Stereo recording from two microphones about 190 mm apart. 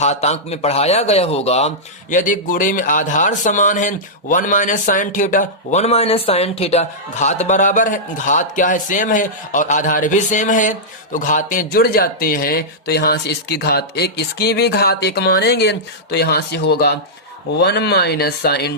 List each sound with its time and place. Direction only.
0.0 s speech: 35° left (ahead or behind); by 18.7 s 55° left (ahead or behind)